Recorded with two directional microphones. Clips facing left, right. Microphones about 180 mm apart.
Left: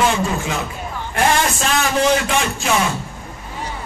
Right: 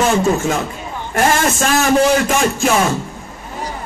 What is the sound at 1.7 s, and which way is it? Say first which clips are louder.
A man's voice: right 4 dB; 45° right (ahead or behind).